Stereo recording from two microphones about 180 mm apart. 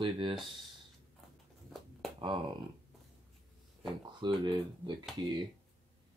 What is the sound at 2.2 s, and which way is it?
Speech, 25° right (ahead or behind).